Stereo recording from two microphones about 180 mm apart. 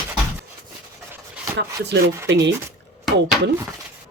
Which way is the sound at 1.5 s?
70° right (ahead or behind).